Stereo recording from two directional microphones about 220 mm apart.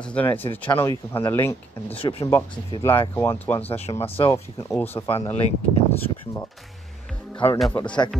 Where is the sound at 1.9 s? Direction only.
25° left (ahead or behind).